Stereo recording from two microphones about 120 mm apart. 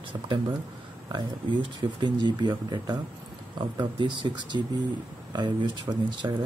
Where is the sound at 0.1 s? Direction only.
45° right (ahead or behind).